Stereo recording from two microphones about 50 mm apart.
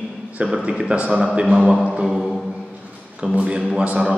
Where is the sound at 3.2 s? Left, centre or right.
Centre.